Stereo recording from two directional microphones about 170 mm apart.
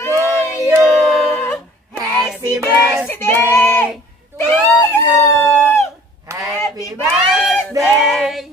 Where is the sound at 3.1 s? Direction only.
10° left (ahead or behind).